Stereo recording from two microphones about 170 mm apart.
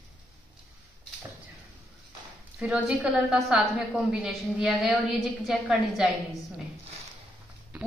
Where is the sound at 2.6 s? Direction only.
5° right (ahead or behind).